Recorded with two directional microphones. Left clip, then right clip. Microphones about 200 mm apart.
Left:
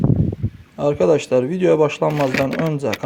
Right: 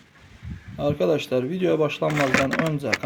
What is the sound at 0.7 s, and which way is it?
Speech, 30° left (ahead or behind).